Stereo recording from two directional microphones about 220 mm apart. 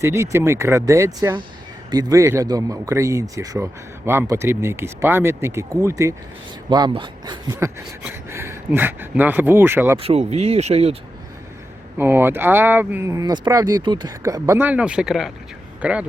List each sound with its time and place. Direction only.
0.0 s a man's voice: 15° right (ahead or behind)
10.0 s speech: 30° right (ahead or behind)
11.9 s a man's voice: 10° right (ahead or behind)